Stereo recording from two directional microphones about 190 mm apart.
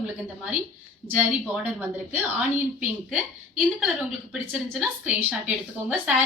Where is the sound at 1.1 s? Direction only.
5° right (ahead or behind).